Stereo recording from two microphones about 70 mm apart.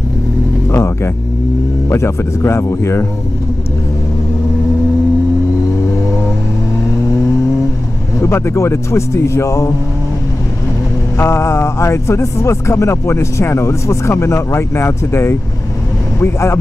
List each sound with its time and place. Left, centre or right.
0.7 s vehicle: left
1.9 s speech: left
8.2 s a man's voice: left
11.1 s speech: left